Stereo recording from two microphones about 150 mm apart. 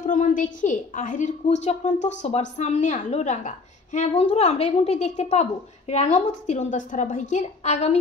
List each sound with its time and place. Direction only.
0.0 s a woman's voice: 55° left (ahead or behind)